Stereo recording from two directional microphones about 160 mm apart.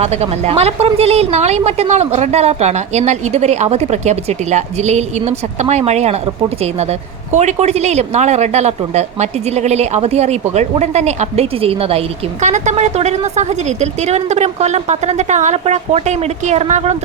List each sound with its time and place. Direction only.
0.0 s speech: 40° right (ahead or behind)
7.3 s speech: 45° right (ahead or behind)